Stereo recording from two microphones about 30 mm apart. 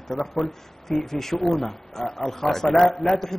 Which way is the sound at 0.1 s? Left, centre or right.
Centre.